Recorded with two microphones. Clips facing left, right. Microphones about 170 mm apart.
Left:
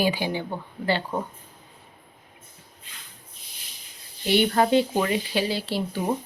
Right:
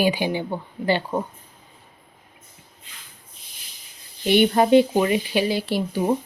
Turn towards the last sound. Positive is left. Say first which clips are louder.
# right 4 dB
turn(degrees=-15)  # may be behind; listen again after turning